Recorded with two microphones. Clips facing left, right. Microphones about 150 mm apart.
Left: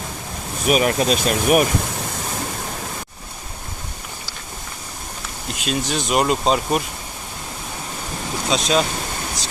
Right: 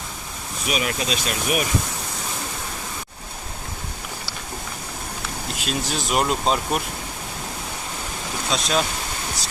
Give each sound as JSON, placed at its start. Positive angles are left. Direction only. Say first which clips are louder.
{"t": 0.7, "sound": "speech", "louder": "left 8 dB", "side_deg": 45}
{"t": 5.5, "sound": "speech", "louder": "left 4 dB", "side_deg": 0}
{"t": 8.4, "sound": "speech", "louder": "left 4 dB", "side_deg": 0}